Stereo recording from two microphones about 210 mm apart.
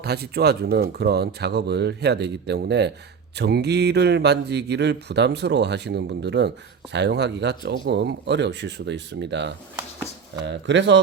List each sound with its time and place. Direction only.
0.0 s speech: 50° right (ahead or behind)